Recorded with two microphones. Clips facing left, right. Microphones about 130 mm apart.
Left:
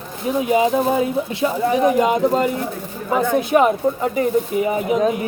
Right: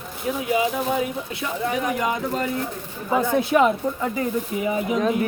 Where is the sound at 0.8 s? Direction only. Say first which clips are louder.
Left 6 dB; 35° left (ahead or behind).